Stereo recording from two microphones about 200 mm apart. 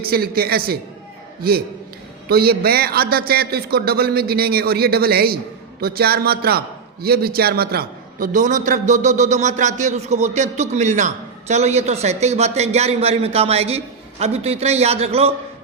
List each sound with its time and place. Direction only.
0.0 s a man's voice: 50° right (ahead or behind); by 15.3 s 30° right (ahead or behind)